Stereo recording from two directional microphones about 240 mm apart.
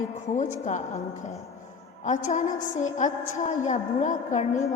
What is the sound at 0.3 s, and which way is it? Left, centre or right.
Speech, left.